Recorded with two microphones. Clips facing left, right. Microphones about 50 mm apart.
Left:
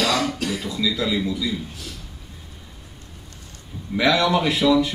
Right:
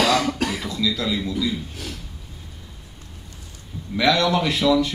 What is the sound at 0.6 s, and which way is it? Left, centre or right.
Speech, centre.